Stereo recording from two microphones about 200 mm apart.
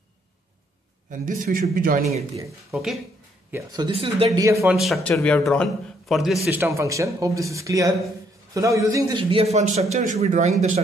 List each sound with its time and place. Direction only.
1.1 s a man's voice: 40° right (ahead or behind)
2.7 s a man's voice: centre (ahead or behind)
3.5 s speech: 20° right (ahead or behind)
4.3 s speech: 15° right (ahead or behind)
4.7 s a man's voice: centre (ahead or behind)
6.6 s a man's voice: 15° right (ahead or behind); by 10.5 s 35° right (ahead or behind)